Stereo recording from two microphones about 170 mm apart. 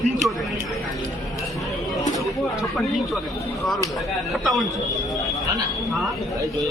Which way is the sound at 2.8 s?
Centre (ahead or behind).